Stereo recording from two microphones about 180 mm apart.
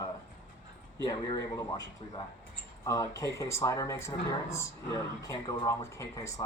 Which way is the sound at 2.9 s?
20° left (ahead or behind).